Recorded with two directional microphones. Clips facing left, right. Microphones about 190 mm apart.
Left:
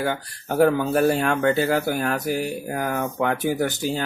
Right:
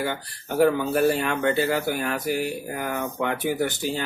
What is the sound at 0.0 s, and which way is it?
Speech, 45° left (ahead or behind).